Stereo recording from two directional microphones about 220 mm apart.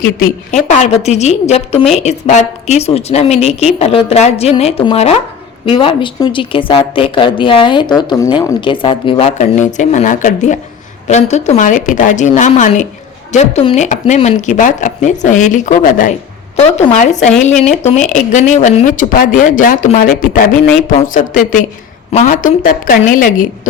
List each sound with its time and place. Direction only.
0.2 s speech: 35° left (ahead or behind)